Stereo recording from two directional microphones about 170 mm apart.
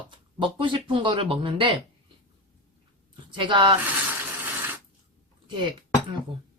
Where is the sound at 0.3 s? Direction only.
30° right (ahead or behind).